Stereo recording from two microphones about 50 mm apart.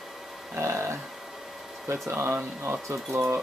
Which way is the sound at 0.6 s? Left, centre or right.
Right.